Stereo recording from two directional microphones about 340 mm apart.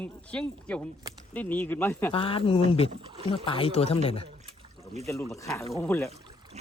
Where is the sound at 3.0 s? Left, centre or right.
Centre.